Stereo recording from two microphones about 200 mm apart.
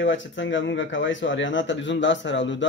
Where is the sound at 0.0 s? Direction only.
65° left (ahead or behind).